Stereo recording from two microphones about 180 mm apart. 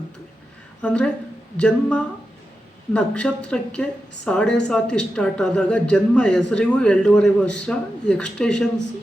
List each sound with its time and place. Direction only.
0.8 s a woman's voice: 5° left (ahead or behind)